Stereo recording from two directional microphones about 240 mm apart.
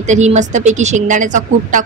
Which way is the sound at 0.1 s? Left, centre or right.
Right.